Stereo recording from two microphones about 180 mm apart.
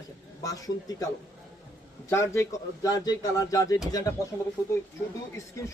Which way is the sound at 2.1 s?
15° left (ahead or behind).